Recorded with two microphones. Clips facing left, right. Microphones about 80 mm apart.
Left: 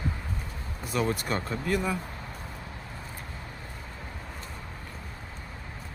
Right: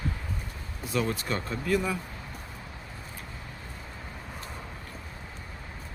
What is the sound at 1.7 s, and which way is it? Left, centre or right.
Speech, centre.